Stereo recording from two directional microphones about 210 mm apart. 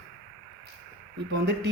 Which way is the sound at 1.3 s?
55° right (ahead or behind).